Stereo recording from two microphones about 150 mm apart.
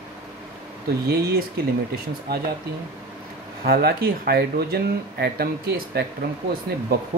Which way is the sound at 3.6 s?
90° right.